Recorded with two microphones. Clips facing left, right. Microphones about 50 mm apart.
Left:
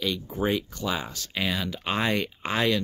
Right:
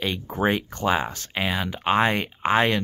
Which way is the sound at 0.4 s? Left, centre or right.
Right.